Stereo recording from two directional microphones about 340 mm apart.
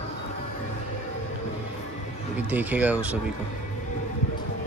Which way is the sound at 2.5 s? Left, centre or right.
Centre.